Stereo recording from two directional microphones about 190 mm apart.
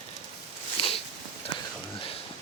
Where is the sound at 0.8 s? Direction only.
30° left (ahead or behind).